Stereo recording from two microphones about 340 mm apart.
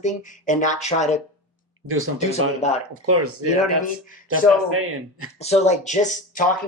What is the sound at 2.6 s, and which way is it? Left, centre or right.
Speech, centre.